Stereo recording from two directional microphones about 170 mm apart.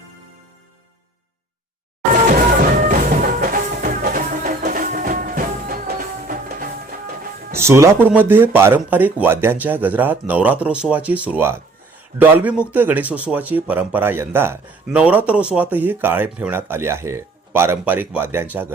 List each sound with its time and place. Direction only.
2.2 s music: 55° right (ahead or behind)
7.5 s speech: 15° right (ahead or behind)